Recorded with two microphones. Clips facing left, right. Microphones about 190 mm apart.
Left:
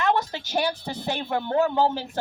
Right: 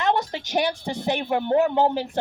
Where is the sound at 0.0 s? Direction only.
20° right (ahead or behind).